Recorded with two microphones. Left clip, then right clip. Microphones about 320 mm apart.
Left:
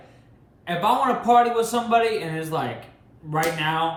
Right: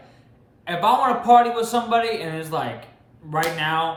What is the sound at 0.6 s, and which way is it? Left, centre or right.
Speech, centre.